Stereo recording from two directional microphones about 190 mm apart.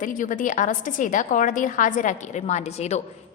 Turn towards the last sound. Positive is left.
turn(degrees=35)  # may be behind; listen again after turning